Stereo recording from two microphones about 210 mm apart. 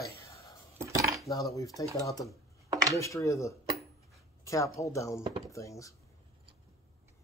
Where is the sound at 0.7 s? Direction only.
15° right (ahead or behind).